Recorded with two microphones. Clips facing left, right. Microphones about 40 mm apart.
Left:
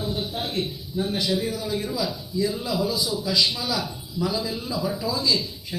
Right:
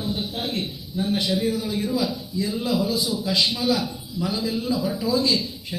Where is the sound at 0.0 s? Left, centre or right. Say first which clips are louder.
Right 1 dB; right.